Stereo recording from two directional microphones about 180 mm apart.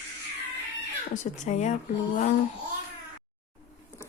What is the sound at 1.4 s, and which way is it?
Speech, 40° left (ahead or behind).